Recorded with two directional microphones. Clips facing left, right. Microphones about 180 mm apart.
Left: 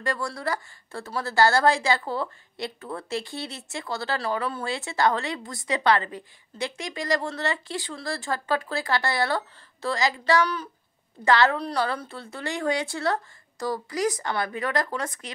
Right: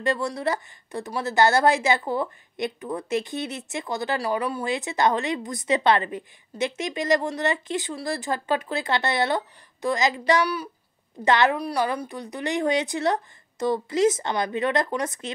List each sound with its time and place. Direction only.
0.0 s a woman's voice: 20° right (ahead or behind)